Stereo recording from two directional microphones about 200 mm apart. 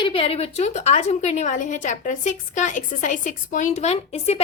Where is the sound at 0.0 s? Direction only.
25° left (ahead or behind).